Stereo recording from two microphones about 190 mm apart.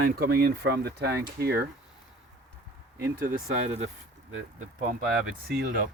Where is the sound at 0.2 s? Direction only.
55° right (ahead or behind).